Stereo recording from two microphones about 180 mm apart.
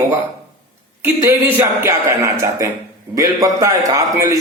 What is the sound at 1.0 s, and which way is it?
A man's voice, 15° right (ahead or behind).